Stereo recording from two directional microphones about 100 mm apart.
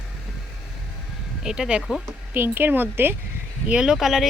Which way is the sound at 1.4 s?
5° right (ahead or behind).